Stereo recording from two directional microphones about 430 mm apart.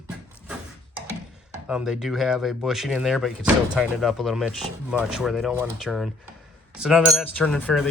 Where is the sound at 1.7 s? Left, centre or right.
Centre.